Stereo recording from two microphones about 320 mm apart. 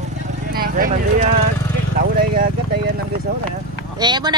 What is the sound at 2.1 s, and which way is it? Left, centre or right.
Speech, right.